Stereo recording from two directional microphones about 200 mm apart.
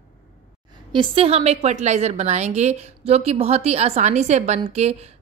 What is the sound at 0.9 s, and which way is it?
A woman's voice, 25° right (ahead or behind).